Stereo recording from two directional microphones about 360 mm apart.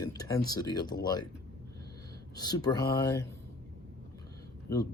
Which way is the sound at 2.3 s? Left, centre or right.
Centre.